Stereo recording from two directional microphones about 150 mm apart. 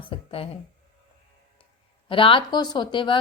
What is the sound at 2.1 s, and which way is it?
A woman's voice, 35° left (ahead or behind).